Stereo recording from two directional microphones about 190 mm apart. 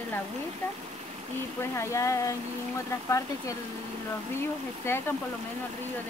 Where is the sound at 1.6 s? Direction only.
15° left (ahead or behind).